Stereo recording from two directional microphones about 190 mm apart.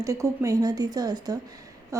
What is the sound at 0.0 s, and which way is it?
A woman's voice, 15° right (ahead or behind).